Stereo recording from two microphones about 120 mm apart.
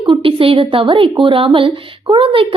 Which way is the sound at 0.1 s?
50° right (ahead or behind).